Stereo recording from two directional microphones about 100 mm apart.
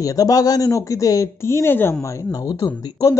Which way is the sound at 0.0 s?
35° left (ahead or behind).